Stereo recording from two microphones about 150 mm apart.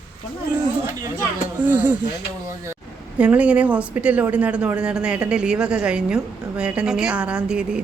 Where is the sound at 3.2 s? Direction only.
10° right (ahead or behind).